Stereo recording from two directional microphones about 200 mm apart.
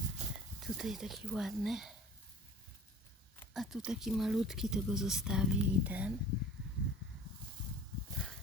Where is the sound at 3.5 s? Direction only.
Centre (ahead or behind).